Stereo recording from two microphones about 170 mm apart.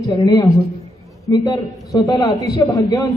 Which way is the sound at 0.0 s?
20° left (ahead or behind).